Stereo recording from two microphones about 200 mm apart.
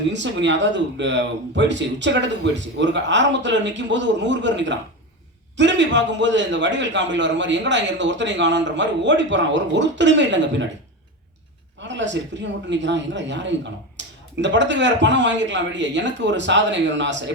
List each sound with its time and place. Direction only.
0.1 s a man's voice: 65° right (ahead or behind)
11.8 s a man's voice: 65° right (ahead or behind)